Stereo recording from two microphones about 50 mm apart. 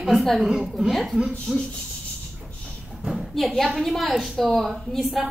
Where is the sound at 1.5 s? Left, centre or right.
Centre.